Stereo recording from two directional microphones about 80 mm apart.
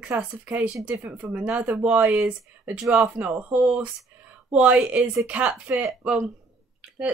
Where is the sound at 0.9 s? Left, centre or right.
Centre.